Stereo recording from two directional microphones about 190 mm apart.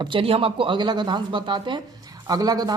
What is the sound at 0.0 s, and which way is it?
Speech, 25° right (ahead or behind).